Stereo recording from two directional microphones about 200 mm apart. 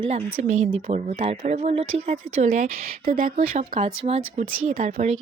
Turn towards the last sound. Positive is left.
turn(degrees=-35)  # may be behind; listen again after turning